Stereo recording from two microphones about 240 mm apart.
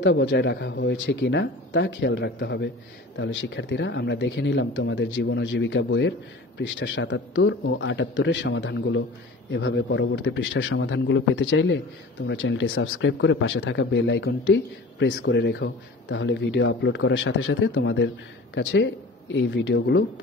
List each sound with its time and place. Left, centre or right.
0.0 s speech: left